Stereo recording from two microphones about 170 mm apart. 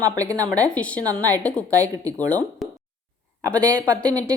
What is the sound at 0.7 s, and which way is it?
A woman's voice, 5° left (ahead or behind).